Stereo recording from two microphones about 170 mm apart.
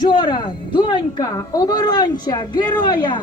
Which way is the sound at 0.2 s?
30° left (ahead or behind).